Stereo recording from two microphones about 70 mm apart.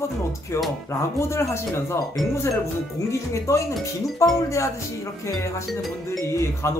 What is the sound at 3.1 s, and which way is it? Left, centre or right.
Speech, left.